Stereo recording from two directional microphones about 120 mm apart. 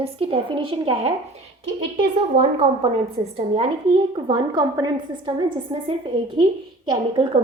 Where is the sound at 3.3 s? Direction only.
50° right (ahead or behind).